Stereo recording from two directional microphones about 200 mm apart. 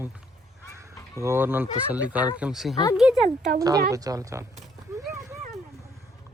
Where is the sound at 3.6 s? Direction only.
15° right (ahead or behind).